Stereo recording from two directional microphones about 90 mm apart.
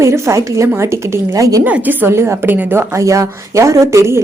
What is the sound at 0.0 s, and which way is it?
Speech, 30° right (ahead or behind).